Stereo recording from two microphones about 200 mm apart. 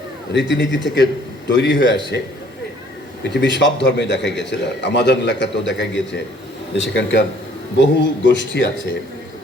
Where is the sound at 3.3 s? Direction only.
60° left (ahead or behind).